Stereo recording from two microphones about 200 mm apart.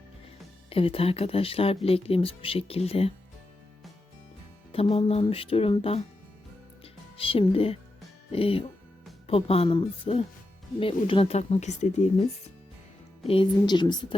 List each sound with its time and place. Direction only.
0.7 s speech: 30° left (ahead or behind)
4.7 s speech: 30° left (ahead or behind)
6.8 s music: 30° left (ahead or behind)
8.3 s speech: 30° left (ahead or behind)
13.2 s speech: 25° left (ahead or behind)